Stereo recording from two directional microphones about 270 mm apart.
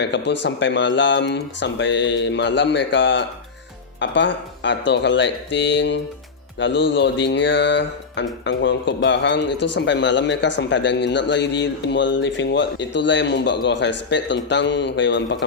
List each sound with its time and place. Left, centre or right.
0.0 s a man's voice: left